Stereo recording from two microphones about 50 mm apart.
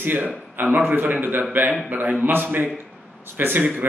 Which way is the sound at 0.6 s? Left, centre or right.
Right.